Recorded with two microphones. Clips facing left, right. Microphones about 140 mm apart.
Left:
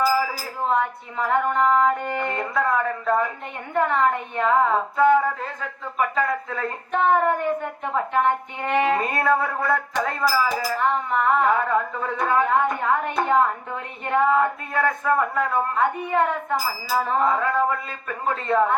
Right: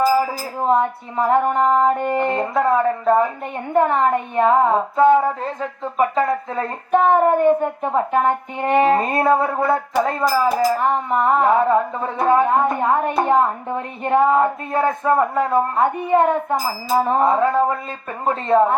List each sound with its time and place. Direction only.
0.6 s music: 35° right (ahead or behind)
6.9 s music: 40° right (ahead or behind)